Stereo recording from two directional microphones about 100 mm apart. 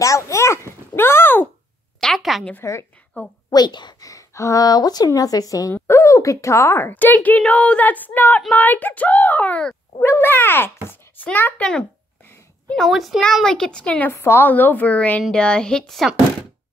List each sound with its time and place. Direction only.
0.0 s a sound: 30° left (ahead or behind)
2.0 s a sound: 5° left (ahead or behind)
2.6 s a woman's voice: 30° left (ahead or behind)
3.4 s a woman's voice: 45° left (ahead or behind); by 9.8 s 10° left (ahead or behind)
9.9 s a child's voice: 20° left (ahead or behind)
14.1 s a child's voice: 25° left (ahead or behind); by 16.1 s 5° left (ahead or behind)